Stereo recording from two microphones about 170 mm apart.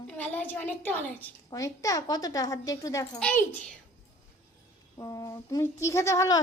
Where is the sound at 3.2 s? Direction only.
5° left (ahead or behind).